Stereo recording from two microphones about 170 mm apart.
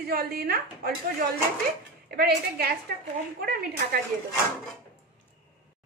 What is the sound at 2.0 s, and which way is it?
Speech, 65° right (ahead or behind).